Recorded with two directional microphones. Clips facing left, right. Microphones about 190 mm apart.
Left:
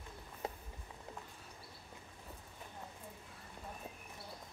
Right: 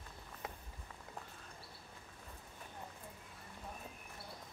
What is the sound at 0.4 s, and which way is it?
Walk, 30° left (ahead or behind).